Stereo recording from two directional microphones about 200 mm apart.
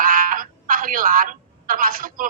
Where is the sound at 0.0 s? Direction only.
45° right (ahead or behind).